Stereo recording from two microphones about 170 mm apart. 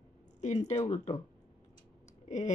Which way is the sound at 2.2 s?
45° left (ahead or behind).